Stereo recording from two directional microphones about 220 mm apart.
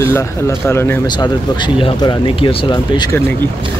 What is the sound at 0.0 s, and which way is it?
A man's voice, 10° left (ahead or behind).